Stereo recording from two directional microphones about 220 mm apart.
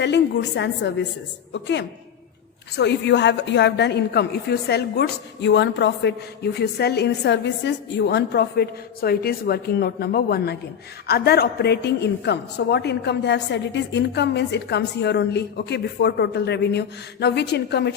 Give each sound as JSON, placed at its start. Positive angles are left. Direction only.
{"t": 0.0, "sound": "a woman's voice", "side_deg": 50}